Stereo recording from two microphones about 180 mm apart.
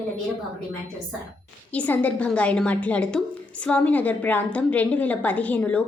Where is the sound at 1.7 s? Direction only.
10° left (ahead or behind).